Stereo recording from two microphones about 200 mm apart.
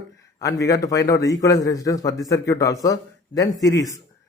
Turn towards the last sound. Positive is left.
turn(degrees=15)  # may be behind; listen again after turning